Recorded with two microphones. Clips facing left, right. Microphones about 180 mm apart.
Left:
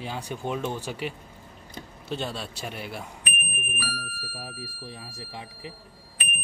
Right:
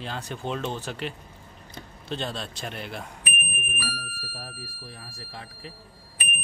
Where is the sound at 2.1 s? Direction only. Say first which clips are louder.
Even; 10° left (ahead or behind).